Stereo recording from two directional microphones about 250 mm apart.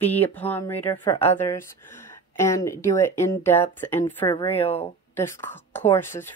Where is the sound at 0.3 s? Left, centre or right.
Centre.